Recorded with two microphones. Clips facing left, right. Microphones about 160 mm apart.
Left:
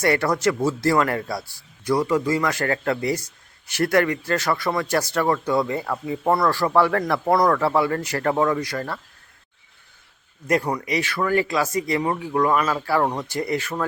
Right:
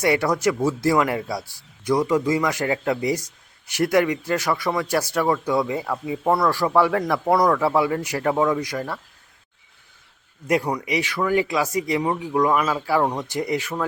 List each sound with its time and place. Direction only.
0.0 s a man's voice: 10° right (ahead or behind)
10.4 s a man's voice: 10° right (ahead or behind)